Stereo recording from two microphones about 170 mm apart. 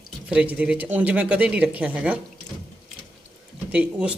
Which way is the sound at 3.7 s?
5° right (ahead or behind).